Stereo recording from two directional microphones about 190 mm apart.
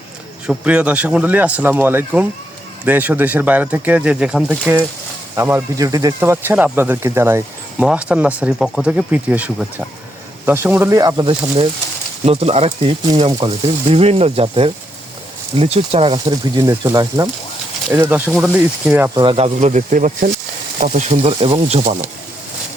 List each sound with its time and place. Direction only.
0.4 s speech: 5° right (ahead or behind)
19.1 s speech: 25° right (ahead or behind)
21.1 s speech: 30° right (ahead or behind)